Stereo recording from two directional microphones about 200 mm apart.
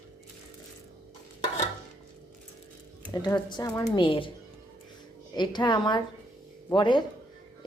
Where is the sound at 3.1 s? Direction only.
20° left (ahead or behind).